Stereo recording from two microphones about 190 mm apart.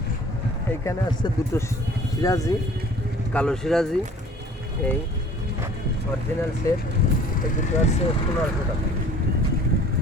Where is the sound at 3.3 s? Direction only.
5° left (ahead or behind).